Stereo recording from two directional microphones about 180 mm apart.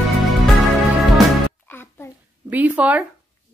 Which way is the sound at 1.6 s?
10° left (ahead or behind).